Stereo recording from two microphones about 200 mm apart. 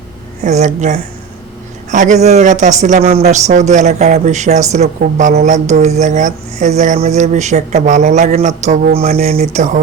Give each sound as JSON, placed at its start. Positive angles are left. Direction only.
{"t": 0.4, "sound": "speech", "side_deg": -35}
{"t": 9.0, "sound": "speech", "side_deg": -30}